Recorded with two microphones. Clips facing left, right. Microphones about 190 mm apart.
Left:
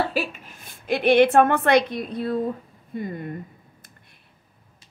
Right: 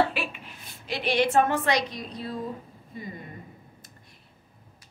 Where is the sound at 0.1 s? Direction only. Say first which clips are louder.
Left 6 dB; 40° left (ahead or behind).